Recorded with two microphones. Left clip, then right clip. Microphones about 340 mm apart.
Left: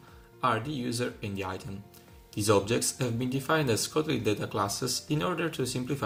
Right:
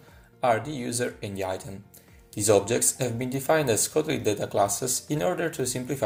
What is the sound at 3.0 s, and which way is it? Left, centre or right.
Speech, right.